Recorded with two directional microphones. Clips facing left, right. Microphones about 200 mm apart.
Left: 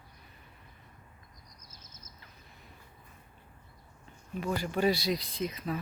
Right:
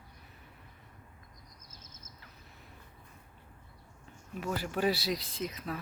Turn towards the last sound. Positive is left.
turn(degrees=0)  # may be behind; listen again after turning